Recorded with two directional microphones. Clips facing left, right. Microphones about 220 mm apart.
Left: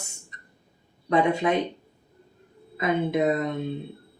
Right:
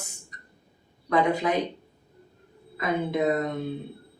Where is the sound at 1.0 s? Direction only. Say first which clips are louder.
Left 2 dB; 25° left (ahead or behind).